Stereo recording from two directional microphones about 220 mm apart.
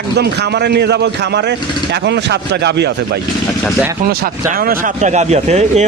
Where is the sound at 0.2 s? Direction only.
50° right (ahead or behind).